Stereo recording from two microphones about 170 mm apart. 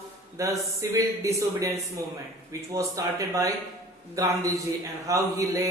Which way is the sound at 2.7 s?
20° right (ahead or behind).